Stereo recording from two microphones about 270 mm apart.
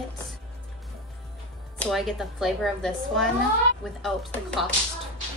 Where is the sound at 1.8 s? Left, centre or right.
Centre.